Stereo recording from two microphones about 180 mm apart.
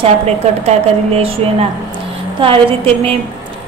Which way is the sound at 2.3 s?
30° right (ahead or behind).